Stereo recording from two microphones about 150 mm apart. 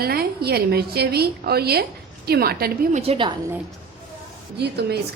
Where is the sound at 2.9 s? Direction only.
40° right (ahead or behind).